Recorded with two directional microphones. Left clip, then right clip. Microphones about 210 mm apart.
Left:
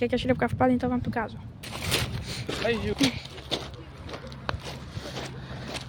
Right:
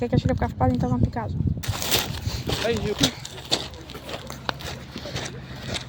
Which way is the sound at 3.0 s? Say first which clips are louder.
Right 3 dB; 40° right (ahead or behind).